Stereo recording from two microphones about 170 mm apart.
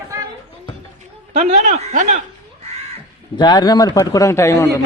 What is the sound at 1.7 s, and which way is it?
Speech, 40° right (ahead or behind).